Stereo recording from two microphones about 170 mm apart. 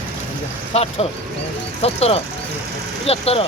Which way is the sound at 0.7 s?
35° left (ahead or behind).